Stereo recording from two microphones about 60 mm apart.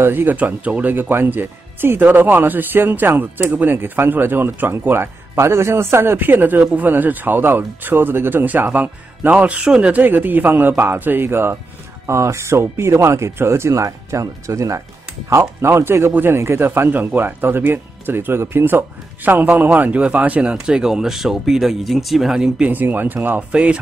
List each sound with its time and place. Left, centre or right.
0.0 s speech: right
12.1 s speech: right
15.2 s speech: right; by 22.5 s centre
22.6 s speech: right
23.5 s speech: centre